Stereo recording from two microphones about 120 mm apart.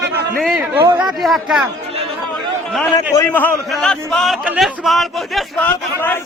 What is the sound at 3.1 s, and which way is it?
Speech, 20° left (ahead or behind).